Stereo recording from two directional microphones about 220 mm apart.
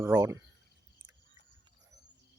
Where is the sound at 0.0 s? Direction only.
15° right (ahead or behind).